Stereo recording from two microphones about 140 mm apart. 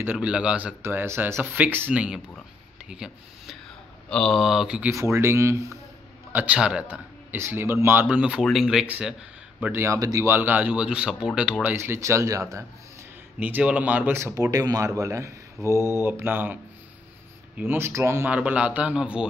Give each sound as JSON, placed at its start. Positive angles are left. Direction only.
{"t": 0.0, "sound": "speech", "side_deg": -10}
{"t": 4.9, "sound": "speech", "side_deg": -20}
{"t": 6.3, "sound": "speech", "side_deg": -10}
{"t": 11.6, "sound": "speech", "side_deg": -15}
{"t": 13.4, "sound": "speech", "side_deg": -10}
{"t": 17.6, "sound": "speech", "side_deg": -15}